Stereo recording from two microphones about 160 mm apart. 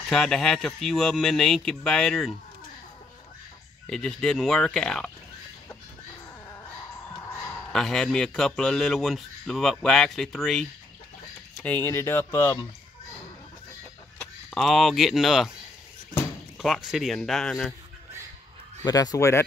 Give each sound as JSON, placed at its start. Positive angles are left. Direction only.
{"t": 0.1, "sound": "a man's voice", "side_deg": 5}
{"t": 3.8, "sound": "a man's voice", "side_deg": 5}
{"t": 7.7, "sound": "a man's voice", "side_deg": 5}
{"t": 14.5, "sound": "a man's voice", "side_deg": 0}
{"t": 16.5, "sound": "a man's voice", "side_deg": 0}
{"t": 18.9, "sound": "speech", "side_deg": 25}